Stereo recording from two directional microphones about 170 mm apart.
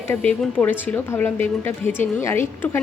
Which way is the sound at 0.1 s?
10° left (ahead or behind).